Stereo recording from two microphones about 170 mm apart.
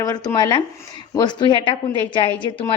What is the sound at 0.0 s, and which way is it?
A woman's voice, 20° left (ahead or behind).